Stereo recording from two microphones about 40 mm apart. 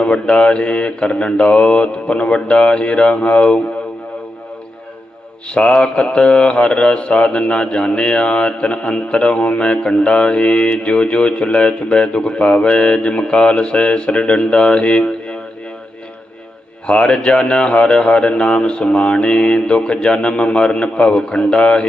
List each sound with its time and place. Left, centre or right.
0.0 s speech: left
5.5 s speech: left
16.8 s speech: left